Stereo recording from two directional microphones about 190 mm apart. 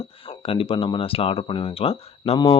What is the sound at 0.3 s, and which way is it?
Speech, 30° left (ahead or behind).